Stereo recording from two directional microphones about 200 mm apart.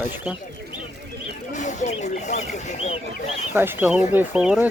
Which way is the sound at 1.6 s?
35° left (ahead or behind).